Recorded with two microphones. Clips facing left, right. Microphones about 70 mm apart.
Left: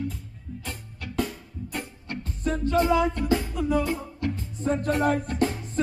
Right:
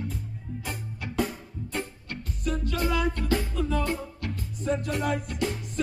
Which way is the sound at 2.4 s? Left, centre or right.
Left.